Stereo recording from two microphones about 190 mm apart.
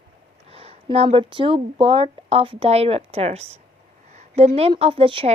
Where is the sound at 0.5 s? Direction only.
30° right (ahead or behind).